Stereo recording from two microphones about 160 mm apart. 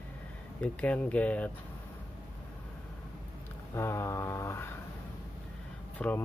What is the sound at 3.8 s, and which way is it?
Speech, 15° left (ahead or behind).